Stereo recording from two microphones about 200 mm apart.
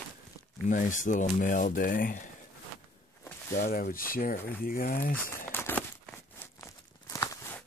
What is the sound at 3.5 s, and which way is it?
Speech, 45° left (ahead or behind).